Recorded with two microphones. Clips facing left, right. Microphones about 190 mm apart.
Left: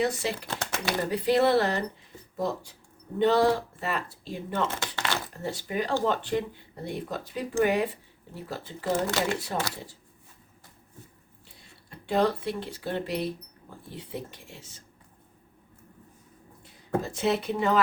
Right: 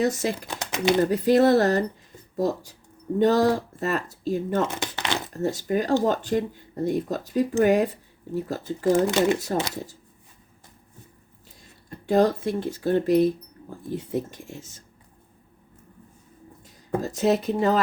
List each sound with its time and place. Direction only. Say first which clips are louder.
0.0 s speech: right 4 dB; 45° right (ahead or behind)
0.4 s speech: right 8 dB; 15° right (ahead or behind)
1.1 s speech: right 2 dB; 45° right (ahead or behind)
4.7 s speech: right 3 dB; 20° right (ahead or behind)
5.4 s speech: right 9 dB; 45° right (ahead or behind)
8.9 s speech: right 7 dB; 15° right (ahead or behind)
11.4 s speech: right 8 dB; 40° right (ahead or behind)
16.6 s speech: right 2 dB; 40° right (ahead or behind)